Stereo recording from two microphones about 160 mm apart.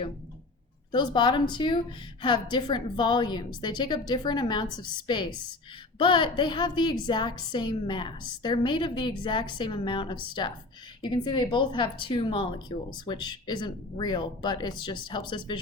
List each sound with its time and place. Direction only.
0.9 s a woman's voice: 30° left (ahead or behind)